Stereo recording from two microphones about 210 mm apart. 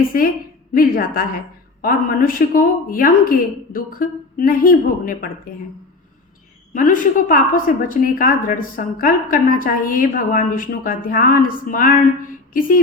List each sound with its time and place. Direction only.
0.1 s a woman's voice: 45° left (ahead or behind)
6.7 s a woman's voice: 40° left (ahead or behind)